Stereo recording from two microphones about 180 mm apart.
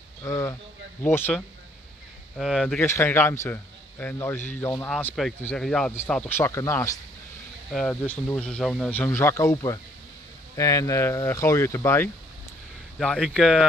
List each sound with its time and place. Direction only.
0.2 s a man's voice: 20° left (ahead or behind)
2.3 s speech: centre (ahead or behind)
2.8 s a man's voice: 15° left (ahead or behind)
7.7 s a man's voice: 5° left (ahead or behind)
13.0 s speech: 5° left (ahead or behind)